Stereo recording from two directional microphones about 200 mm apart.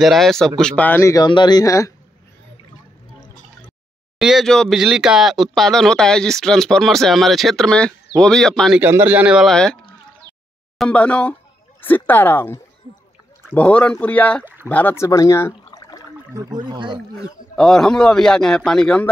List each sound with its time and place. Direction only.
0.0 s speech: centre (ahead or behind); by 2.0 s 15° left (ahead or behind)
4.2 s speech: centre (ahead or behind)
14.4 s a sound: 10° right (ahead or behind)
14.7 s speech: 10° left (ahead or behind)
16.3 s speech: 20° right (ahead or behind)
17.6 s speech: centre (ahead or behind)